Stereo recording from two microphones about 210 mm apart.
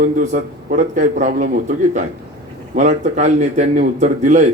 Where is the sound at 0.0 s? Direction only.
35° right (ahead or behind).